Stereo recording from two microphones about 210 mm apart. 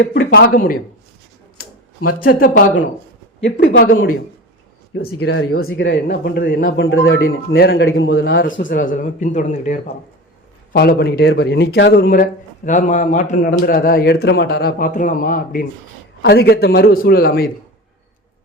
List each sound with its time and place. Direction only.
0.0 s speech: 50° left (ahead or behind)
2.2 s a man's voice: 45° left (ahead or behind)
5.1 s speech: 90° left
5.6 s a man's voice: 60° left (ahead or behind); by 6.7 s 40° left (ahead or behind)
6.7 s a man's voice: 65° left (ahead or behind); by 9.9 s 35° left (ahead or behind)
10.7 s a man's voice: 45° left (ahead or behind)